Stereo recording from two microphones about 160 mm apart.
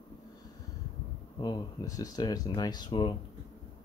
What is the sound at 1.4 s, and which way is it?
Speech, 25° left (ahead or behind).